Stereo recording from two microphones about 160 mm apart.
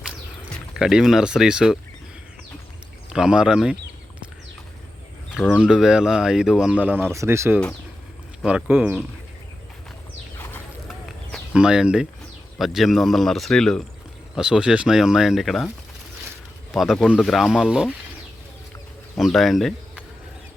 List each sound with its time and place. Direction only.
0.8 s speech: 5° right (ahead or behind)
3.1 s speech: 5° right (ahead or behind)
5.3 s speech: centre (ahead or behind)
10.8 s a sound: centre (ahead or behind)
12.5 s speech: centre (ahead or behind)
16.7 s speech: centre (ahead or behind)
19.1 s speech: centre (ahead or behind)